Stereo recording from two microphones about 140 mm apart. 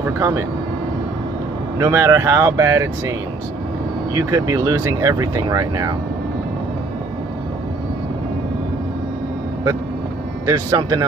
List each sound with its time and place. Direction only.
0.2 s speech: 20° right (ahead or behind)
1.8 s speech: 20° right (ahead or behind)
4.1 s speech: 25° right (ahead or behind)
10.4 s speech: 25° right (ahead or behind)